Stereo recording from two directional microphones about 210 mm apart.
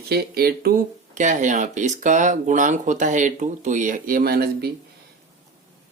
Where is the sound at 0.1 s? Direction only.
45° right (ahead or behind).